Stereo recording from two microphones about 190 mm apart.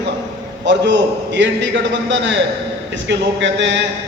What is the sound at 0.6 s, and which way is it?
A man's voice, 70° right (ahead or behind).